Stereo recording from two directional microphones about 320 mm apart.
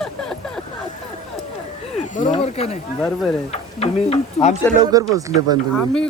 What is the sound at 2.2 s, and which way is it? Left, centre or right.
Speech, centre.